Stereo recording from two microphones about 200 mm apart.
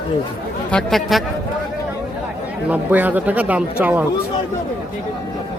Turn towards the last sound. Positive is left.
turn(degrees=-5)  # may be behind; listen again after turning